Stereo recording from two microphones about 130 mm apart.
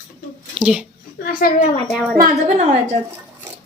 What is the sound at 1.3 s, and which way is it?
Speech, 90° left.